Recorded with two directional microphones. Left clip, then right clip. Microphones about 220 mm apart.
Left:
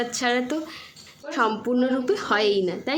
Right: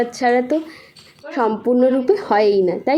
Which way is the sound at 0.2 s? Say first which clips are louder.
Right 8 dB; 5° right (ahead or behind).